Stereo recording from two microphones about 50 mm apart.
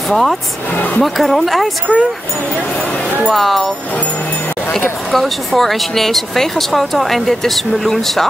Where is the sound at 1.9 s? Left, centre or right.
Centre.